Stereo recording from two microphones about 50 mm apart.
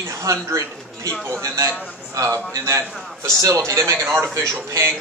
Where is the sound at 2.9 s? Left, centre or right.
Centre.